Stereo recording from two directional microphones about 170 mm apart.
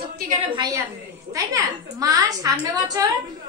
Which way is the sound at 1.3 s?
20° right (ahead or behind).